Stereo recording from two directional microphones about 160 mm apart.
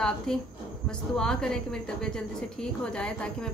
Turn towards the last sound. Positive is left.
turn(degrees=5)  # may be behind; listen again after turning